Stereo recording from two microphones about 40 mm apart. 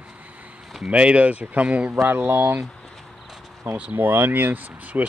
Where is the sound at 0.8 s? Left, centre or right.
Right.